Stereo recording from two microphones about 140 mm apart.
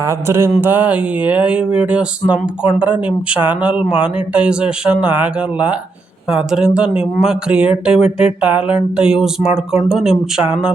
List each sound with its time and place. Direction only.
0.0 s speech: 20° right (ahead or behind)